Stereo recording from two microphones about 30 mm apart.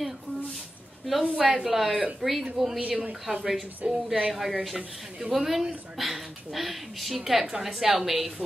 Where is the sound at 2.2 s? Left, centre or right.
Centre.